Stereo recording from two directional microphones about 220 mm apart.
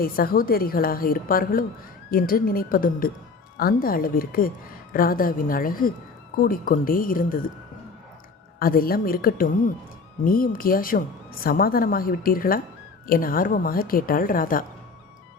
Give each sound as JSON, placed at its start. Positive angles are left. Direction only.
{"t": 0.0, "sound": "a woman's voice", "side_deg": 40}
{"t": 8.5, "sound": "a woman's voice", "side_deg": 40}